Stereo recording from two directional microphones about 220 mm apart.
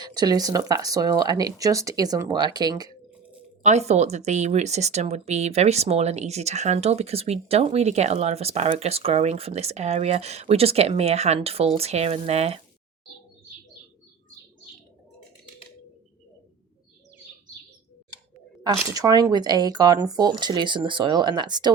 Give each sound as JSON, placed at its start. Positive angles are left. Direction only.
{"t": 0.0, "sound": "speech", "side_deg": -20}
{"t": 3.6, "sound": "speech", "side_deg": -30}
{"t": 18.9, "sound": "speech", "side_deg": -15}